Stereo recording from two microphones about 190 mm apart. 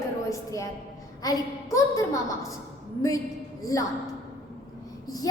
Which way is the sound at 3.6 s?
20° left (ahead or behind).